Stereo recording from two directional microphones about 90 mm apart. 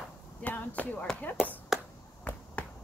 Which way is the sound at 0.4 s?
15° left (ahead or behind).